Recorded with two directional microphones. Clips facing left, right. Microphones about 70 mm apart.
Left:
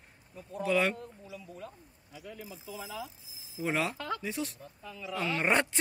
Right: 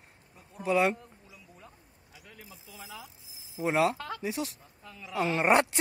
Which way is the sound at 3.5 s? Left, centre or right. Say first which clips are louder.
Right 5 dB; centre.